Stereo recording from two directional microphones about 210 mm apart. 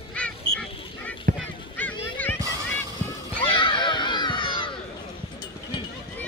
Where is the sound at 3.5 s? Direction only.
25° left (ahead or behind).